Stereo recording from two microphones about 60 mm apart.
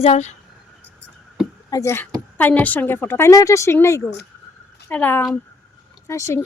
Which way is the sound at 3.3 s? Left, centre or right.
Left.